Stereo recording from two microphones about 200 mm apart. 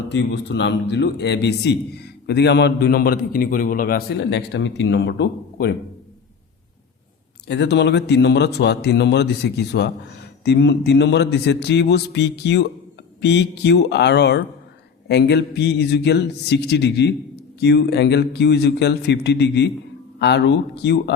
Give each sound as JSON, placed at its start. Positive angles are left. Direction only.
{"t": 0.1, "sound": "speech", "side_deg": 60}
{"t": 4.2, "sound": "speech", "side_deg": 60}
{"t": 7.4, "sound": "speech", "side_deg": 60}